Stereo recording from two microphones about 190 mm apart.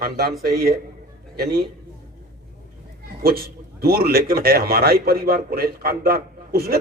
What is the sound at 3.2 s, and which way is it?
A man's voice, 55° right (ahead or behind).